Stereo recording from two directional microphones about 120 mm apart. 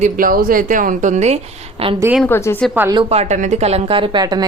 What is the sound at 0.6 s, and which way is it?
A woman's voice, 90° right.